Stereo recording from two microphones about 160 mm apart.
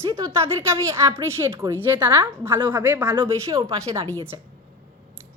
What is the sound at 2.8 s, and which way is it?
A woman's voice, 15° right (ahead or behind).